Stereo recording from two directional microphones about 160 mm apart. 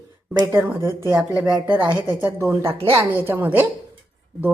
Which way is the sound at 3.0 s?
10° right (ahead or behind).